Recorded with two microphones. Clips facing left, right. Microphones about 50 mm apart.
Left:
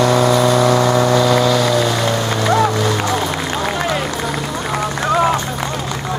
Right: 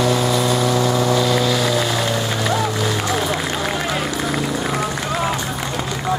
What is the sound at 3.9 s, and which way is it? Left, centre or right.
Run, centre.